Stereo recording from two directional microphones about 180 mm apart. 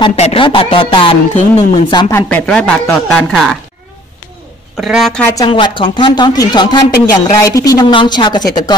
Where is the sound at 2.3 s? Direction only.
5° left (ahead or behind).